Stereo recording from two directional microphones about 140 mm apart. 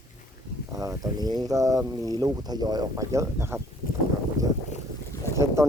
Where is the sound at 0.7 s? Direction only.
25° right (ahead or behind).